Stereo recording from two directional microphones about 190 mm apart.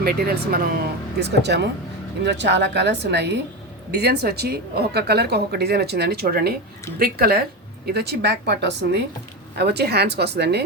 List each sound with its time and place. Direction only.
0.0 s a woman's voice: 55° right (ahead or behind)